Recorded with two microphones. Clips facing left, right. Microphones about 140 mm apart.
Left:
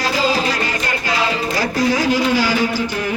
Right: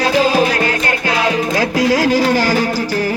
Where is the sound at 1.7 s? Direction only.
90° right.